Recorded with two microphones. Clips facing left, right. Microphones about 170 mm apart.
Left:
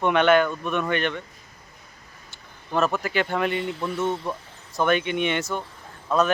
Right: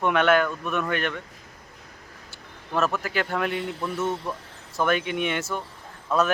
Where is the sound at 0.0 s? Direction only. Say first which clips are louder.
Left 2 dB; centre (ahead or behind).